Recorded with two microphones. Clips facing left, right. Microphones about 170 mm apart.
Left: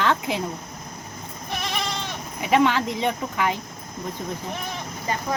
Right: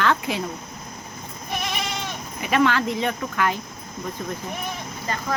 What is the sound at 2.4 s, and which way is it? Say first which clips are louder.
Speech: left 1 dB; 20° left (ahead or behind).